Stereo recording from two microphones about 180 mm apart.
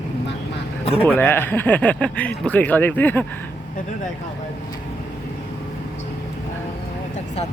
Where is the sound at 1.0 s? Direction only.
10° left (ahead or behind).